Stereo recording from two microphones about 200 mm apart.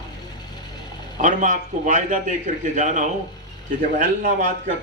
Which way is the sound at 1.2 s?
40° right (ahead or behind).